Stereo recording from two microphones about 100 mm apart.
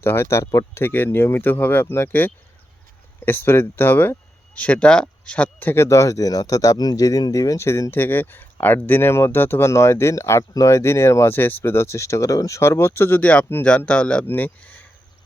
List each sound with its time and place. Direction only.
0.0 s speech: 25° left (ahead or behind)